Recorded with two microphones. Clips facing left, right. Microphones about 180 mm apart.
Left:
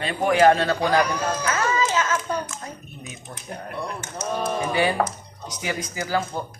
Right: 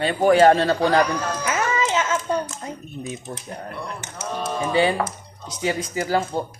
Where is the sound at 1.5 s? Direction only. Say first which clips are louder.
Right 2 dB; 15° right (ahead or behind).